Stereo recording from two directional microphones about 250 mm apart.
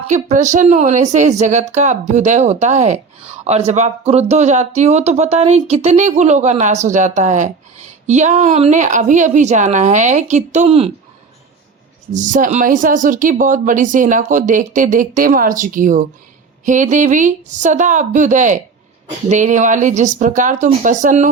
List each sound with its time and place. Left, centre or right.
0.1 s speech: right
12.1 s speech: right